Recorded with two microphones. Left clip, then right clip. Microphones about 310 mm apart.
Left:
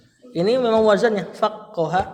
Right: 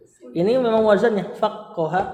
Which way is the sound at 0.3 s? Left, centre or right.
Left.